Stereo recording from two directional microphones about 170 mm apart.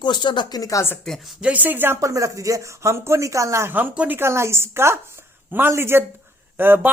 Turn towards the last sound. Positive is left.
turn(degrees=-10)  # may be behind; listen again after turning